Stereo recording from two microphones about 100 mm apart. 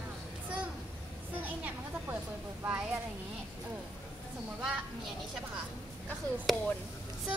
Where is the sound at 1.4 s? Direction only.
20° right (ahead or behind).